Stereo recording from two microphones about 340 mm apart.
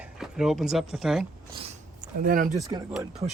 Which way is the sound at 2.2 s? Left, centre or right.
Right.